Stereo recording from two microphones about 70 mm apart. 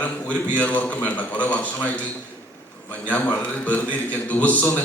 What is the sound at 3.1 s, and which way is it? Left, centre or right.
A man's voice, left.